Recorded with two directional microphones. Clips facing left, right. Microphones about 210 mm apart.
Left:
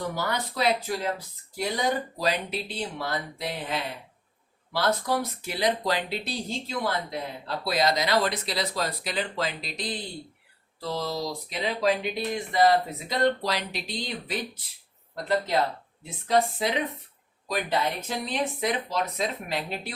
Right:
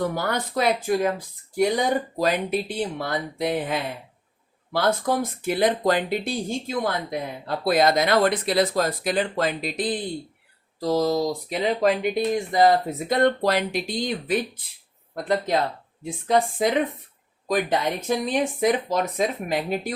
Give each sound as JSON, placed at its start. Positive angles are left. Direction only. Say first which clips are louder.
{"t": 0.2, "sound": "speech", "louder": "right 4 dB", "side_deg": -50}
{"t": 10.8, "sound": "speech", "louder": "right 9 dB", "side_deg": -40}